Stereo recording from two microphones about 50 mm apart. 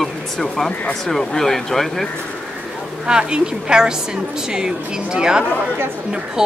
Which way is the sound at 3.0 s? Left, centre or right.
Centre.